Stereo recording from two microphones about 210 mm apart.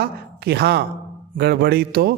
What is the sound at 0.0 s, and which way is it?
A man's voice, 50° right (ahead or behind).